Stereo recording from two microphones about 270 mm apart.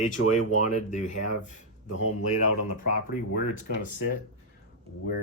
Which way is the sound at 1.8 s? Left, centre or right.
Left.